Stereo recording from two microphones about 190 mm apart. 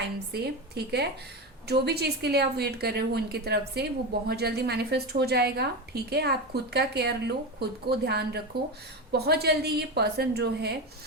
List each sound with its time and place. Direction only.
0.3 s a woman's voice: 60° right (ahead or behind)